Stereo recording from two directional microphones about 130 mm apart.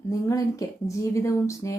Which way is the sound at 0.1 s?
25° left (ahead or behind).